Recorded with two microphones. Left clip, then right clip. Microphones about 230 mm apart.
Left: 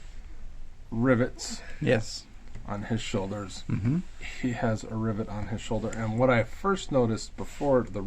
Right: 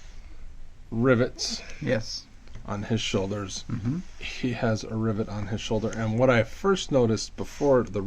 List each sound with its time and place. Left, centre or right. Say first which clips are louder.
0.9 s speech: right 3 dB; right
1.8 s speech: left 2 dB; left
2.6 s speech: right 4 dB; right